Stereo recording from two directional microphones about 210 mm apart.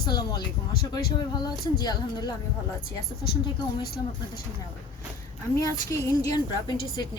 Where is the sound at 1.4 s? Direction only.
20° left (ahead or behind).